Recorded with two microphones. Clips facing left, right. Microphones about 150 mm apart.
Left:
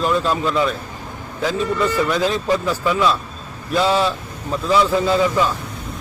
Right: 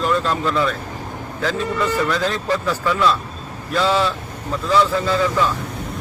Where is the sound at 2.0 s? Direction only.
10° left (ahead or behind).